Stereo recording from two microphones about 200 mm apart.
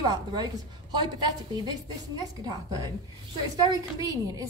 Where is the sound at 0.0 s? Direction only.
20° right (ahead or behind).